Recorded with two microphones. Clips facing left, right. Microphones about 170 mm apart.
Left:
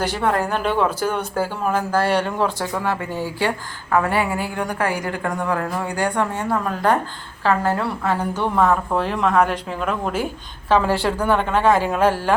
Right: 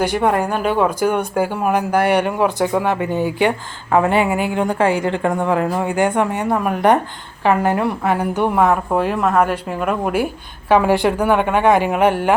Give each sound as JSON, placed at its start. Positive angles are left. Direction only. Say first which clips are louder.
{"t": 0.0, "sound": "a woman's voice", "louder": "right 4 dB", "side_deg": -15}